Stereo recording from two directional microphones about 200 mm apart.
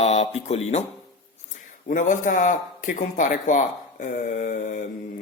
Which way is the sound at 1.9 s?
40° left (ahead or behind).